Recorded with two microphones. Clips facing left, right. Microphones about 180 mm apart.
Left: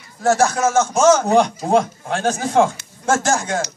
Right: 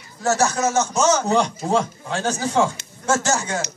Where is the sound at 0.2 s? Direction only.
55° left (ahead or behind).